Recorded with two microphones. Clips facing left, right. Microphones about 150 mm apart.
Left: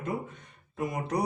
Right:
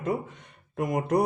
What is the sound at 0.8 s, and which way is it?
Speech, 55° right (ahead or behind).